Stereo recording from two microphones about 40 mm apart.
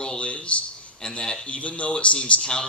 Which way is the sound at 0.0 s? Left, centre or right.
Left.